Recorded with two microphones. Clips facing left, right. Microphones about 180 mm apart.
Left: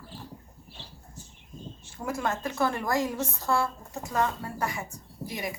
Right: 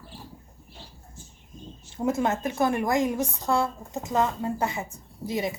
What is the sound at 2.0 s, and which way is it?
A woman's voice, 20° right (ahead or behind).